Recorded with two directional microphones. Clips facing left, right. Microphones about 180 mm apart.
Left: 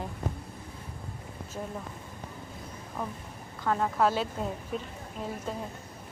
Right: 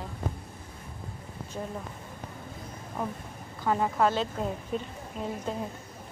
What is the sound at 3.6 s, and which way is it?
Speech, 10° right (ahead or behind).